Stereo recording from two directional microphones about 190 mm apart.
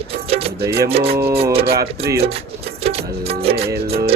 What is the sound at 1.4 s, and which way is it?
Music, 30° right (ahead or behind).